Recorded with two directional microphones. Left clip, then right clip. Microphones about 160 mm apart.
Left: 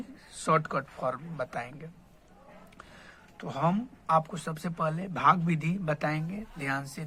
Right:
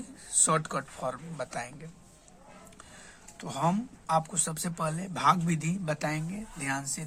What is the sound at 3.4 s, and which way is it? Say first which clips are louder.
Speech: even; 25° left (ahead or behind).